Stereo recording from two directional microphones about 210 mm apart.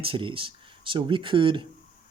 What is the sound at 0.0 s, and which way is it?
Speech, 25° right (ahead or behind).